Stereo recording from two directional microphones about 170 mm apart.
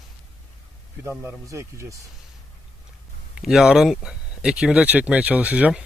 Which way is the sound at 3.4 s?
Centre (ahead or behind).